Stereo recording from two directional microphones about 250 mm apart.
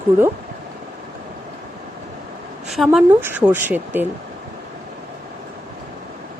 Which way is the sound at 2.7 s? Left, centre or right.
Centre.